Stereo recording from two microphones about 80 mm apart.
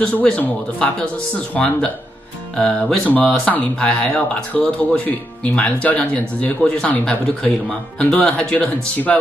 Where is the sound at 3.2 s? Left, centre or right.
Centre.